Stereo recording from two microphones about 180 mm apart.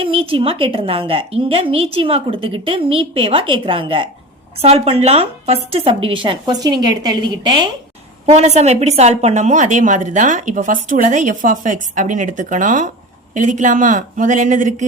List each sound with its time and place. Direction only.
0.0 s a woman's voice: 30° right (ahead or behind)
8.3 s a woman's voice: 40° right (ahead or behind)